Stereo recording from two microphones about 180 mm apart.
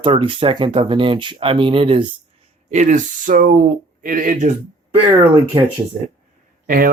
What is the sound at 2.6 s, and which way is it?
Speech, 40° right (ahead or behind).